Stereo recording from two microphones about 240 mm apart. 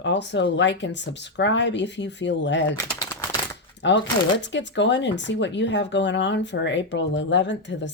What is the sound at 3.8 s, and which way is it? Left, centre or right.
Speech, left.